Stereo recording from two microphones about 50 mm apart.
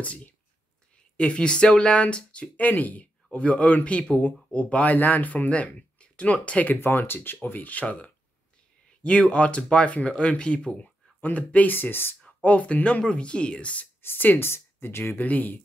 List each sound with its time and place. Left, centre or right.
0.0 s a man's voice: left
1.1 s speech: left
2.5 s a man's voice: left
6.8 s a man's voice: left
11.7 s speech: left
12.4 s speech: left
14.0 s speech: left
14.5 s speech: left
15.1 s a man's voice: left